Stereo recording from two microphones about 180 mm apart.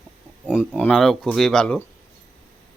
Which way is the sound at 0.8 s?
5° left (ahead or behind).